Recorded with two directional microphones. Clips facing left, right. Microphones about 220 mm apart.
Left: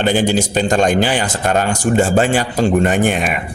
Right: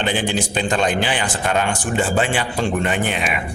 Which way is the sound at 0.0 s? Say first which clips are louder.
Left 6 dB; 45° left (ahead or behind).